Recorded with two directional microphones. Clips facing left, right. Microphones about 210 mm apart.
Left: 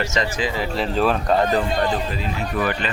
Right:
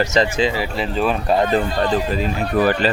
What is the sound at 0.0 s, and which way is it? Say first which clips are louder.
Speech: right 6 dB; 35° right (ahead or behind).